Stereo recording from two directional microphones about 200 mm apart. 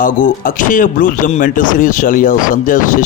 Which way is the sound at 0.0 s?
45° left (ahead or behind).